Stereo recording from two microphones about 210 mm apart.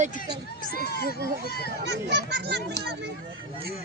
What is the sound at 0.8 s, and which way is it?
Speech, 50° left (ahead or behind).